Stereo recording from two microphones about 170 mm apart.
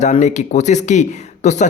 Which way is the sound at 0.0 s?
45° left (ahead or behind).